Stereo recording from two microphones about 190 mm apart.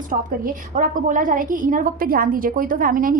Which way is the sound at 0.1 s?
45° right (ahead or behind).